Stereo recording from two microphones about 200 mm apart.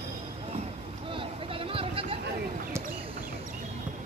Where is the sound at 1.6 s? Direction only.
25° right (ahead or behind).